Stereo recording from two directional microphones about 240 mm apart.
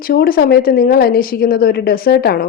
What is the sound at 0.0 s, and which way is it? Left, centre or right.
Speech, left.